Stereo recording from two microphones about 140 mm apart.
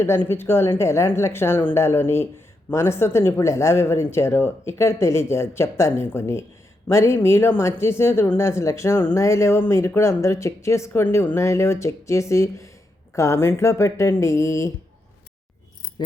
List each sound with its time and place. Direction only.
0.3 s speech: 15° left (ahead or behind)